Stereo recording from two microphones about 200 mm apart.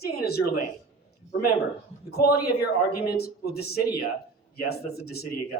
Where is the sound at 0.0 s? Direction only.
50° left (ahead or behind).